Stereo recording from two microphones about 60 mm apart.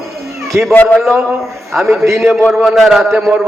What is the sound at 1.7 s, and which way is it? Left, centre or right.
A man's voice, centre.